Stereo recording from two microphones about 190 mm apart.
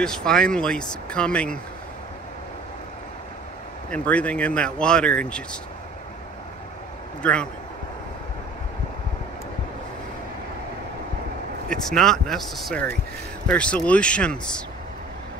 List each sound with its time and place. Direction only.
0.0 s speech: 5° left (ahead or behind)
3.9 s speech: 5° left (ahead or behind)
7.2 s a man's voice: 5° left (ahead or behind)
11.7 s speech: 5° left (ahead or behind)